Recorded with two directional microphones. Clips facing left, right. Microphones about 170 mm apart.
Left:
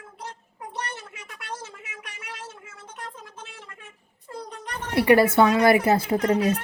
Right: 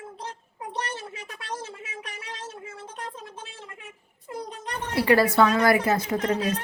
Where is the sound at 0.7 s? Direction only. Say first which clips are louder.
Right 2 dB; 30° right (ahead or behind).